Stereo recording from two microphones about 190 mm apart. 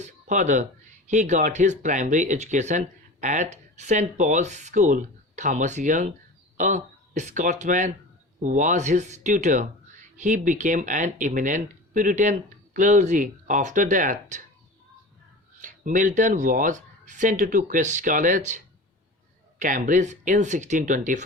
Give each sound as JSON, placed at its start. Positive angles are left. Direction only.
{"t": 0.0, "sound": "a sound", "side_deg": -40}
{"t": 1.1, "sound": "speech", "side_deg": -40}
{"t": 15.6, "sound": "speech", "side_deg": -45}